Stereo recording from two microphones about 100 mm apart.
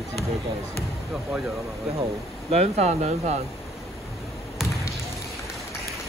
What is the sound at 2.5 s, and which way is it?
Speech, 90° right.